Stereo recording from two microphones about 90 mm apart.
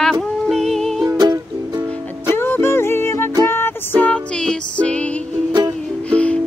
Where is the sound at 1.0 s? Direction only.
45° right (ahead or behind).